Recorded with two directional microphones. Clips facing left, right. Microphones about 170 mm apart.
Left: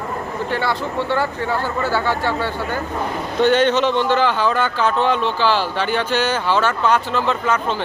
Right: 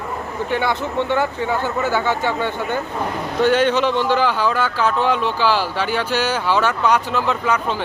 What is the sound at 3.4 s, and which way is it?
Speech, 5° right (ahead or behind).